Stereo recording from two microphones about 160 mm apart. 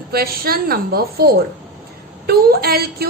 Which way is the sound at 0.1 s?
70° right (ahead or behind).